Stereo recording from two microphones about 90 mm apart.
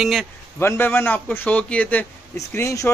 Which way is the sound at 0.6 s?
25° left (ahead or behind).